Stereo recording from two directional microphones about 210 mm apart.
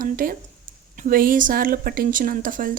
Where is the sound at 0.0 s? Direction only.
40° right (ahead or behind).